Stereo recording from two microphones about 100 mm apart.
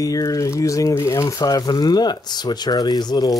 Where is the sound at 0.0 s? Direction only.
35° left (ahead or behind).